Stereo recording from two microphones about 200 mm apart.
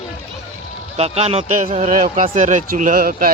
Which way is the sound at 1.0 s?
30° right (ahead or behind).